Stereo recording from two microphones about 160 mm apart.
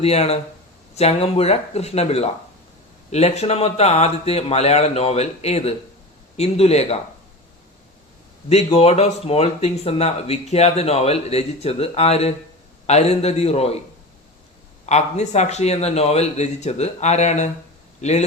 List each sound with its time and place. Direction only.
0.0 s speech: 40° left (ahead or behind)
8.4 s speech: 40° left (ahead or behind)
14.8 s a man's voice: 45° left (ahead or behind)